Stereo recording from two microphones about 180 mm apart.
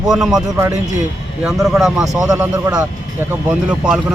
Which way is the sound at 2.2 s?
15° right (ahead or behind).